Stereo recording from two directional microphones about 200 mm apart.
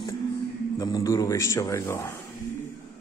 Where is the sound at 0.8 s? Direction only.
20° left (ahead or behind).